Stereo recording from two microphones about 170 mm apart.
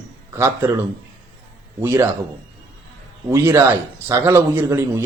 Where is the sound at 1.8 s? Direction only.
15° right (ahead or behind).